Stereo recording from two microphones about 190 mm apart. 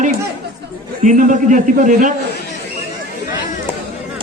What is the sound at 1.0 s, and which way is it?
A man's voice, 40° right (ahead or behind).